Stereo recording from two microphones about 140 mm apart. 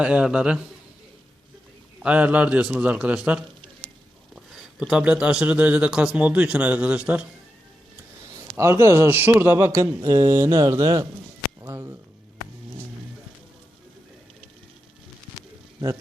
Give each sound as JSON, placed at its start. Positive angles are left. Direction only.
{"t": 0.0, "sound": "speech", "side_deg": -5}
{"t": 2.0, "sound": "speech", "side_deg": -10}
{"t": 8.5, "sound": "a man's voice", "side_deg": -20}